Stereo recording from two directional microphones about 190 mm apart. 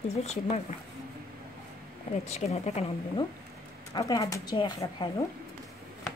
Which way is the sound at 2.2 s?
35° left (ahead or behind).